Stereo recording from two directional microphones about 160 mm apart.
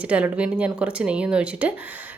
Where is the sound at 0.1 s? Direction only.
5° right (ahead or behind).